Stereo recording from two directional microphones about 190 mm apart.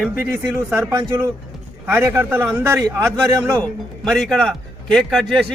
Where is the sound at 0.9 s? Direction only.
20° right (ahead or behind).